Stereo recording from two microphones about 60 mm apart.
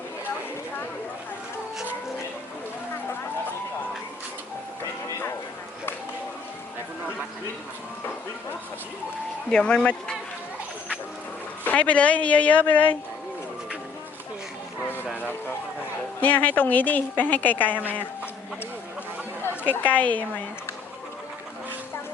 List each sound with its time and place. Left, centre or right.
9.5 s speech: centre
11.6 s a woman's voice: left
15.2 s a sound: left
16.2 s a woman's voice: left
19.8 s a woman's voice: left